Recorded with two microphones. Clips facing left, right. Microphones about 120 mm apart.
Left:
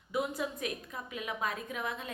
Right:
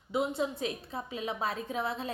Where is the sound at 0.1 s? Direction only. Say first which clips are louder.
Right 3 dB; 25° right (ahead or behind).